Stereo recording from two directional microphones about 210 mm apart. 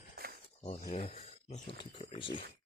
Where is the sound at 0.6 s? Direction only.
35° left (ahead or behind).